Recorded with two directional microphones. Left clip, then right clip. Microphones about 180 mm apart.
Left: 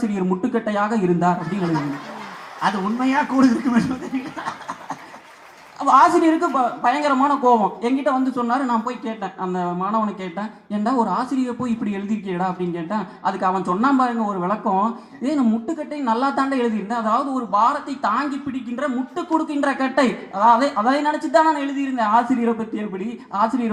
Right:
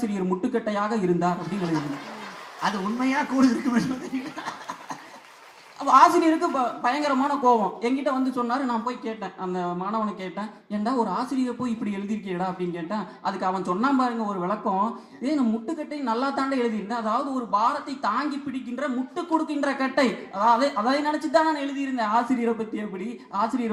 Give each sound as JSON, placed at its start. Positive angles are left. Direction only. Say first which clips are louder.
{"t": 0.1, "sound": "a man's voice", "louder": "left 4 dB", "side_deg": -25}
{"t": 5.8, "sound": "a man's voice", "louder": "left 3 dB", "side_deg": -25}
{"t": 23.3, "sound": "a man's voice", "louder": "left 5 dB", "side_deg": -25}